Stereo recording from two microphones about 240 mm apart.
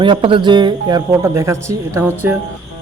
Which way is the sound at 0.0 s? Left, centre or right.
Centre.